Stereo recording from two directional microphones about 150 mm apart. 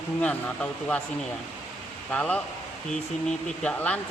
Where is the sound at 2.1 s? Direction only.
10° left (ahead or behind).